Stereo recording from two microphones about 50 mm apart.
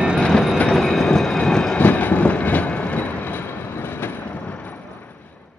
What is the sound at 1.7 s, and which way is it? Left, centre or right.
Train, left.